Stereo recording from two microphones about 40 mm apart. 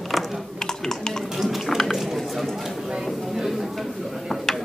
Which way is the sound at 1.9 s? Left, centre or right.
Centre.